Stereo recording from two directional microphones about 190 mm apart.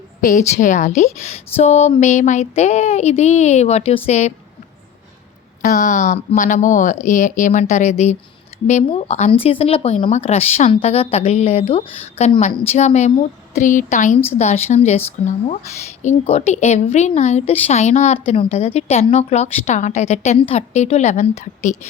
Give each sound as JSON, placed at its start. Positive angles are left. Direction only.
{"t": 0.2, "sound": "speech", "side_deg": 45}
{"t": 5.6, "sound": "speech", "side_deg": 40}
{"t": 16.0, "sound": "speech", "side_deg": 35}